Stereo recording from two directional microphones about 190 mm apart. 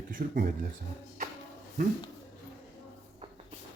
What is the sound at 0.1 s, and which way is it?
Speech, 50° right (ahead or behind).